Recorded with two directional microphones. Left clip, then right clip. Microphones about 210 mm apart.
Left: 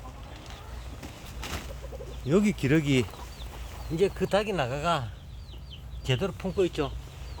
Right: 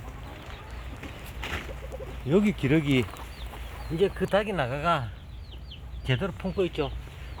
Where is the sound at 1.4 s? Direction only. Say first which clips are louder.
Right 3 dB; 45° left (ahead or behind).